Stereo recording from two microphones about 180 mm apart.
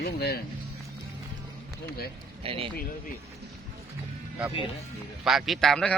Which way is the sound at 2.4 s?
30° right (ahead or behind).